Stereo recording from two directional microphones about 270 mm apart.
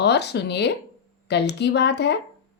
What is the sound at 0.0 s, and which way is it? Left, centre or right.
Speech, left.